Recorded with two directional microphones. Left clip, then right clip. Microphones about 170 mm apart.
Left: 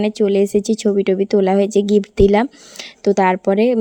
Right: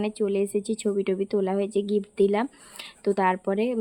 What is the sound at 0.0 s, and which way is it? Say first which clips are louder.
A woman's voice: left 10 dB; 35° left (ahead or behind).